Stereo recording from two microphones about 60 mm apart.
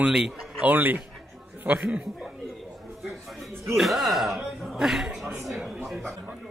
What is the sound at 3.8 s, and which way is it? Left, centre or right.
Speech, centre.